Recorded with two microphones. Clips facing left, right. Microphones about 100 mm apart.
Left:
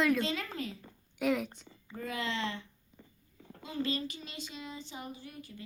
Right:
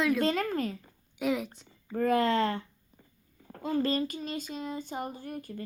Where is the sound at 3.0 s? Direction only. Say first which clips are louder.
Left 5 dB; 65° left (ahead or behind).